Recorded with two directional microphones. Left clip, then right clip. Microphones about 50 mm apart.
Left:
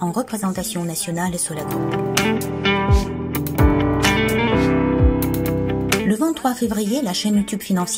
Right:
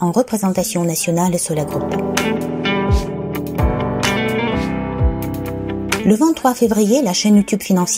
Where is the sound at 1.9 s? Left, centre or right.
Centre.